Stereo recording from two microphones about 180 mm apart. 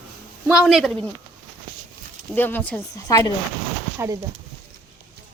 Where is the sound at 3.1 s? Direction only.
20° left (ahead or behind).